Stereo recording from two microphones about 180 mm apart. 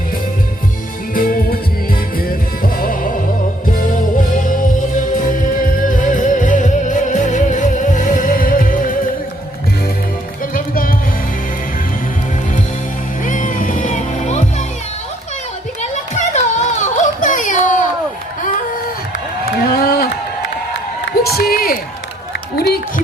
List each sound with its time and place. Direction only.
1.1 s music: 50° left (ahead or behind)
2.7 s music: 50° left (ahead or behind)
10.5 s music: 50° left (ahead or behind)
13.2 s music: 50° left (ahead or behind)
15.8 s a sound: 40° left (ahead or behind)
19.6 s crowd: 60° left (ahead or behind)
21.3 s a sound: 55° left (ahead or behind)
22.5 s music: 60° left (ahead or behind)